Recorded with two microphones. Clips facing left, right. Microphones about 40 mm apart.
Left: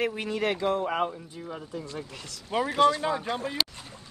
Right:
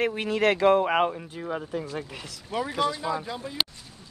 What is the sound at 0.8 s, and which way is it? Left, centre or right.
Speech, right.